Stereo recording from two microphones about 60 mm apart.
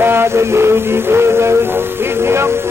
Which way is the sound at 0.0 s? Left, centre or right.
Right.